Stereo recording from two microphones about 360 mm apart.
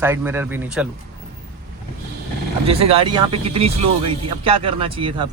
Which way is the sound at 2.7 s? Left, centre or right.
Centre.